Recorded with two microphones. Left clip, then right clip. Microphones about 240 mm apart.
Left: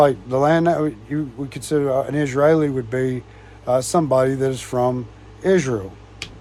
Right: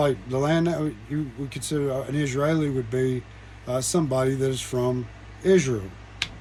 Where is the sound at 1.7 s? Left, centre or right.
Left.